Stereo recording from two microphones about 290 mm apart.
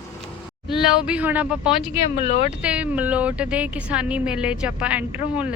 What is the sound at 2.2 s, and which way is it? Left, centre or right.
Speech, left.